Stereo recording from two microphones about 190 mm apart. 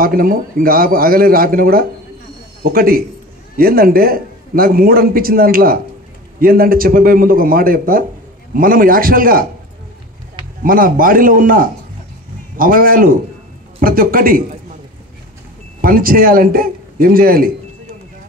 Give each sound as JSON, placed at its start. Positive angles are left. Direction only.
{"t": 0.0, "sound": "a man's voice", "side_deg": -50}
{"t": 10.6, "sound": "a man's voice", "side_deg": -50}
{"t": 15.8, "sound": "a man's voice", "side_deg": -50}